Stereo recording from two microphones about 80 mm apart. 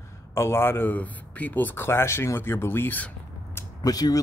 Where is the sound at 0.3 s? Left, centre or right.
Left.